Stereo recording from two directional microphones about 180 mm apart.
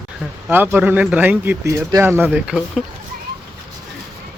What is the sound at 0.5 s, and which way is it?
Speech, 10° right (ahead or behind).